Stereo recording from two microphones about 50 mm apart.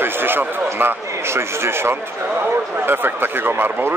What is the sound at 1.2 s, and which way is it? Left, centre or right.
Speech, right.